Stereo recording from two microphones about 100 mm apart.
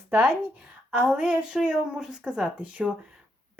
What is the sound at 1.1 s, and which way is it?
Speech, 10° right (ahead or behind).